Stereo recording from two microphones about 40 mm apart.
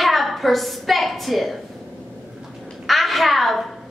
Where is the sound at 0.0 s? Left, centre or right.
Centre.